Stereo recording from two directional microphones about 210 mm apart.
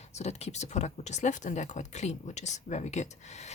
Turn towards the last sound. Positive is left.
turn(degrees=35)  # may be behind; listen again after turning